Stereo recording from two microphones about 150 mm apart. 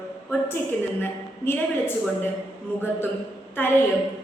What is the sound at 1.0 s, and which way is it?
Speech, 15° left (ahead or behind).